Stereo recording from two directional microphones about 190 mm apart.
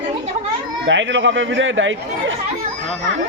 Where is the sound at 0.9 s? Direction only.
80° right.